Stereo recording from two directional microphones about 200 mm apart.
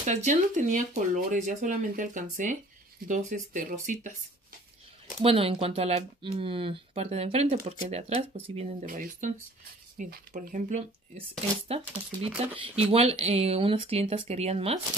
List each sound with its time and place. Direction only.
0.0 s speech: 35° right (ahead or behind)
5.2 s speech: 30° right (ahead or behind)
8.8 s speech: 40° right (ahead or behind)